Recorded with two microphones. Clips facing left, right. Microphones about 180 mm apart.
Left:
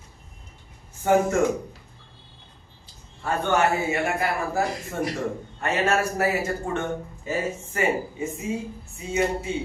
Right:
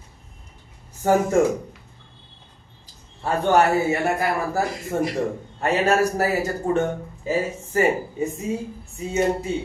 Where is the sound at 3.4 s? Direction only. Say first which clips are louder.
Right 5 dB; 35° right (ahead or behind).